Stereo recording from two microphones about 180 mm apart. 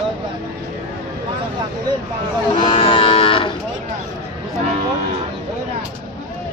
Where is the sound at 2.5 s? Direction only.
25° left (ahead or behind).